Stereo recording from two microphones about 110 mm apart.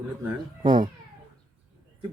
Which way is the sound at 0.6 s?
45° right (ahead or behind).